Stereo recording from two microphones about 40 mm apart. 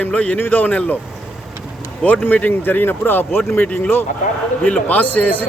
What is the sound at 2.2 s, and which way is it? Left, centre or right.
Speech, left.